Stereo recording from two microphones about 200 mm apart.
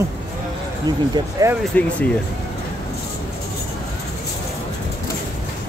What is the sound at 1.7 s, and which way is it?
Speech, 5° left (ahead or behind).